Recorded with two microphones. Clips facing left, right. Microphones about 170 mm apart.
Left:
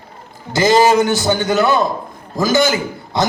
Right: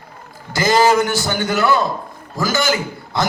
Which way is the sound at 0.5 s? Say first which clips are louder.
Left 3 dB; 20° left (ahead or behind).